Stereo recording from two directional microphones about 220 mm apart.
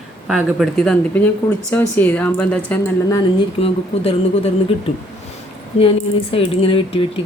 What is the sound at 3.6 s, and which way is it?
Speech, 25° left (ahead or behind).